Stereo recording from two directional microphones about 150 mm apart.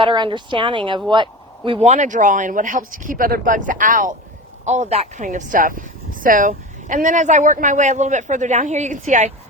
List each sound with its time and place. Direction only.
0.0 s speech: 30° right (ahead or behind)
1.9 s speech: 55° right (ahead or behind)
4.6 s speech: 50° right (ahead or behind)